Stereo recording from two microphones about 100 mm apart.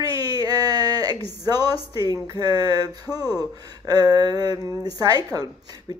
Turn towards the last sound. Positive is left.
turn(degrees=-40)  # may be behind; listen again after turning